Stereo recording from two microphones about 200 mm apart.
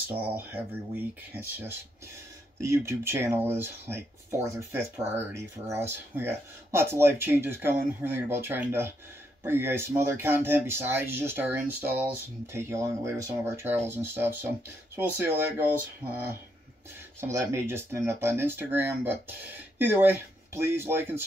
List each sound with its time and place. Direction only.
0.5 s speech: 10° right (ahead or behind)
17.2 s speech: 15° right (ahead or behind)